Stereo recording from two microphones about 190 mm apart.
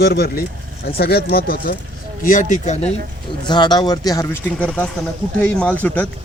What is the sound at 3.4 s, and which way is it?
A man's voice, 25° left (ahead or behind).